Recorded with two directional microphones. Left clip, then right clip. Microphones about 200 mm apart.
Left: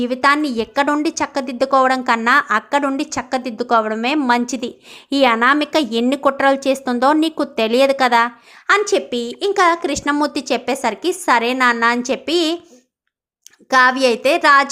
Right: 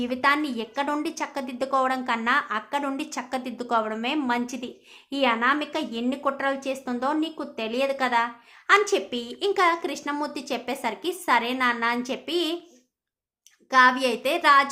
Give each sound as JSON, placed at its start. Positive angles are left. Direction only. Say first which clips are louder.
{"t": 0.0, "sound": "a woman's voice", "louder": "left 8 dB", "side_deg": 30}
{"t": 13.7, "sound": "a woman's voice", "louder": "left 6 dB", "side_deg": 35}